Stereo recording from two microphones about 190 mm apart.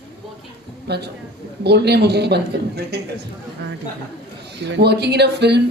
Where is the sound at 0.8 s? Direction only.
60° right (ahead or behind).